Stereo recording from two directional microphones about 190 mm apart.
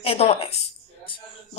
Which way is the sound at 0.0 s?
30° left (ahead or behind).